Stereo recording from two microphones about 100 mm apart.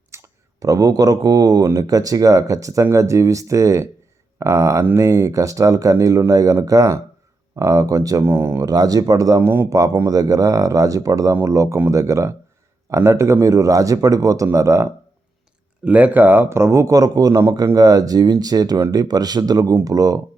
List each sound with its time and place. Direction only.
0.1 s speech: 30° right (ahead or behind)
8.2 s speech: 25° right (ahead or behind)
8.6 s speech: 40° right (ahead or behind)
15.8 s speech: 15° right (ahead or behind); by 20.2 s 35° right (ahead or behind)